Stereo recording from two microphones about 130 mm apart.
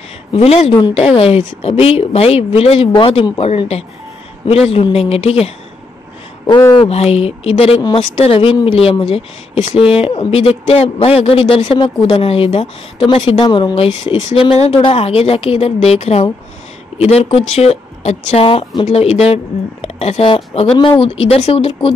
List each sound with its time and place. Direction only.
0.3 s speech: 55° left (ahead or behind)
6.8 s speech: 50° left (ahead or behind)